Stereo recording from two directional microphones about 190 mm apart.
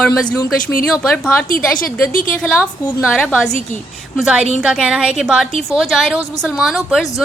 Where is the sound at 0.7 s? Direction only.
Centre (ahead or behind).